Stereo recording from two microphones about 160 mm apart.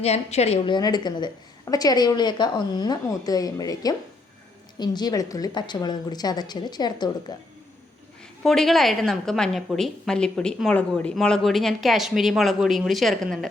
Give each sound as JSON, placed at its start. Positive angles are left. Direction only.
{"t": 0.0, "sound": "a woman's voice", "side_deg": 40}
{"t": 8.4, "sound": "a woman's voice", "side_deg": 0}